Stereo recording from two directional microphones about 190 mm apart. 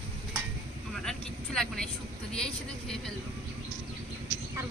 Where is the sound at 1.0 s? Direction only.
5° left (ahead or behind).